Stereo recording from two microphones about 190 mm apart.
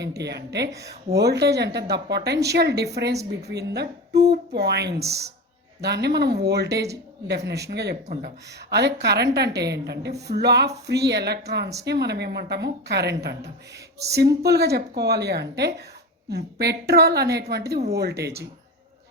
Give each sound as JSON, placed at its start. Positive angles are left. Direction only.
{"t": 0.0, "sound": "a woman's voice", "side_deg": -60}
{"t": 0.7, "sound": "speech", "side_deg": -15}
{"t": 1.1, "sound": "a woman's voice", "side_deg": -60}
{"t": 4.9, "sound": "speech", "side_deg": -15}
{"t": 5.8, "sound": "a woman's voice", "side_deg": -60}